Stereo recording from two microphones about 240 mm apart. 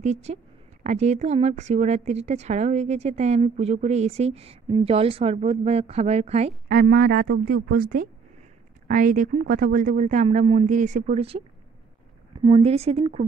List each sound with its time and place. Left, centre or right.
0.0 s a woman's voice: right
12.4 s a woman's voice: right